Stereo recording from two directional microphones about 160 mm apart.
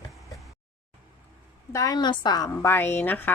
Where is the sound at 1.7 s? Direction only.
20° left (ahead or behind).